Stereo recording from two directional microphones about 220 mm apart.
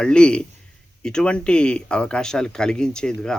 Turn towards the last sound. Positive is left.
turn(degrees=5)  # may be behind; listen again after turning